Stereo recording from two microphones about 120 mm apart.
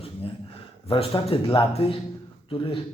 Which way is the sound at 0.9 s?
50° left (ahead or behind).